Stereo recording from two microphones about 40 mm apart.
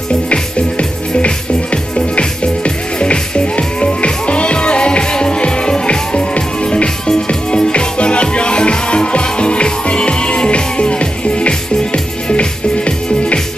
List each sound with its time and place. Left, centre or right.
0.3 s music: left